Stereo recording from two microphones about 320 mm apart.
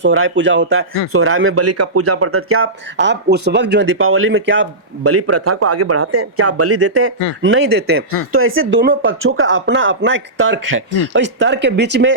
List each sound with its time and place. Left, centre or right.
0.0 s speech: right